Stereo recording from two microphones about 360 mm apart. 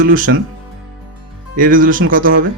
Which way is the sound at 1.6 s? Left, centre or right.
Right.